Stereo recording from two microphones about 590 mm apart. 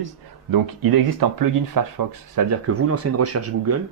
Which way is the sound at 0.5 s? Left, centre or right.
Right.